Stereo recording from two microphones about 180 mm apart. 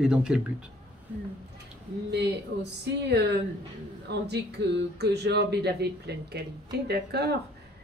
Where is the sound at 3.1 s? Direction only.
70° right (ahead or behind).